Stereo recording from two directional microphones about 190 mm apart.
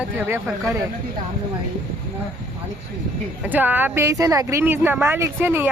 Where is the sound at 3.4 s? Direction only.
10° right (ahead or behind).